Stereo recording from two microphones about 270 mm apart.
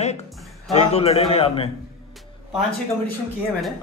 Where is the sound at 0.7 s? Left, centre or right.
Left.